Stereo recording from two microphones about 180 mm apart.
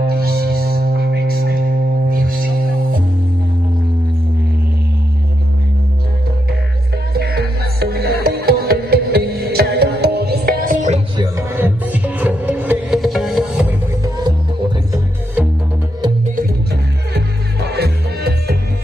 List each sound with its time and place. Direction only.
0.0 s music: 60° right (ahead or behind)
7.2 s music: 60° right (ahead or behind); by 11.0 s 45° right (ahead or behind)
11.5 s music: 10° right (ahead or behind)
14.0 s music: 20° right (ahead or behind)
17.1 s music: 65° right (ahead or behind)